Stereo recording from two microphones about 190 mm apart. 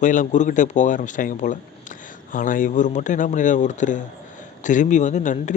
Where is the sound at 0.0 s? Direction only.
40° left (ahead or behind).